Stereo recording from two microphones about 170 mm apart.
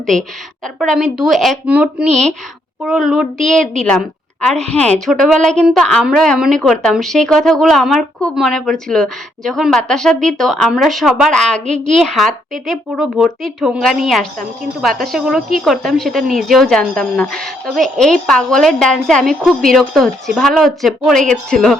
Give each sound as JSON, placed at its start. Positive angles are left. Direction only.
{"t": 0.0, "sound": "a woman's voice", "side_deg": 5}